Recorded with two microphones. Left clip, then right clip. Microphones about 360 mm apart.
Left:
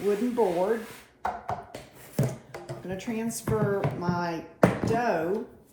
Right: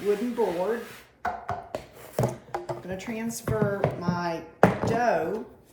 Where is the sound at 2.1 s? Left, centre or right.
Centre.